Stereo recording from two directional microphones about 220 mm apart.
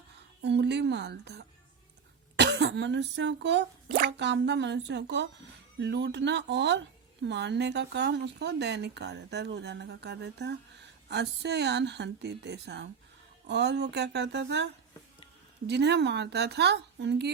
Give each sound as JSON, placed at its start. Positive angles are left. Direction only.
{"t": 0.4, "sound": "speech", "side_deg": -50}